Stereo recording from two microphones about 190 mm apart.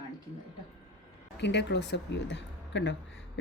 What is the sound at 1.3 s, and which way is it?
Speech, 65° left (ahead or behind).